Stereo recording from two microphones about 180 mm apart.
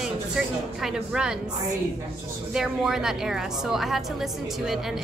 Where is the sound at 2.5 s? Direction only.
5° right (ahead or behind).